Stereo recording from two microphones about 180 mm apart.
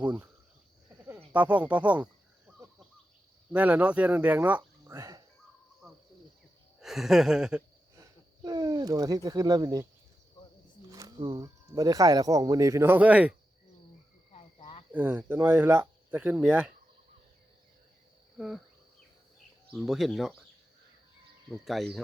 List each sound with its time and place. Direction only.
0.0 s speech: 10° right (ahead or behind)
0.9 s a sound: 10° right (ahead or behind)
3.5 s speech: 5° right (ahead or behind)
5.8 s cricket: centre (ahead or behind)
6.7 s a sound: centre (ahead or behind)
7.9 s speech: 20° right (ahead or behind)
10.4 s insect: 25° left (ahead or behind)
10.9 s speech: 25° right (ahead or behind); by 13.3 s 10° right (ahead or behind)
14.3 s cricket: 35° left (ahead or behind)
14.9 s speech: 10° right (ahead or behind)
18.3 s cricket: centre (ahead or behind)
19.7 s speech: centre (ahead or behind)
21.5 s speech: centre (ahead or behind)